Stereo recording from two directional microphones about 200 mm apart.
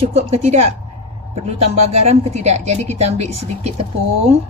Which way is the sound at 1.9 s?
30° right (ahead or behind).